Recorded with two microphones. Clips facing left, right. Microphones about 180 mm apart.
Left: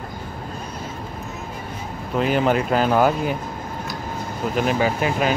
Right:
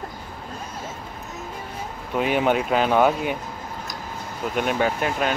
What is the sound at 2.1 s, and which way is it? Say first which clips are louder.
Speech: left 2 dB; centre (ahead or behind).